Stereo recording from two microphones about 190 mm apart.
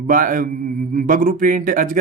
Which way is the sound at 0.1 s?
45° right (ahead or behind).